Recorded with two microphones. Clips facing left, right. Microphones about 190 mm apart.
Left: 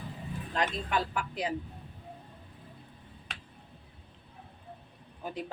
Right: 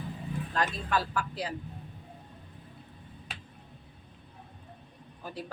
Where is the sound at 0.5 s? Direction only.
20° left (ahead or behind).